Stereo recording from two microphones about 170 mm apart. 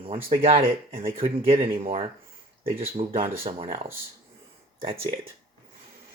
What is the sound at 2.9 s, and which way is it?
Speech, 35° right (ahead or behind).